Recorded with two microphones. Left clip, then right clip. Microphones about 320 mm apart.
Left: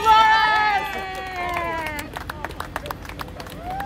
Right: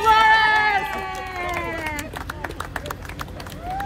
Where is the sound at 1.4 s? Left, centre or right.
Left.